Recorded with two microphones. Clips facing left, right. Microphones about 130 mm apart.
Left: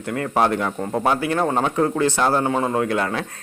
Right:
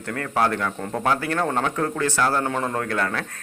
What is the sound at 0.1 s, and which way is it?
Speech, 20° left (ahead or behind).